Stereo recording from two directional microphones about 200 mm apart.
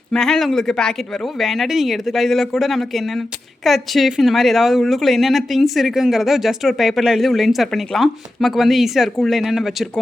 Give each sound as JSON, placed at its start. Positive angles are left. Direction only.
{"t": 0.1, "sound": "speech", "side_deg": 0}